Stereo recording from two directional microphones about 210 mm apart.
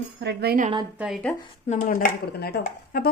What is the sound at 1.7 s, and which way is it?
A woman's voice, 40° left (ahead or behind).